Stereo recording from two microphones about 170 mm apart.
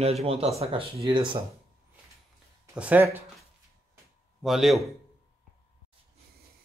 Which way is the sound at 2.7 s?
10° right (ahead or behind).